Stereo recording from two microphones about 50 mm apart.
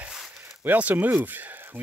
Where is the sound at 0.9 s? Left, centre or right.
Right.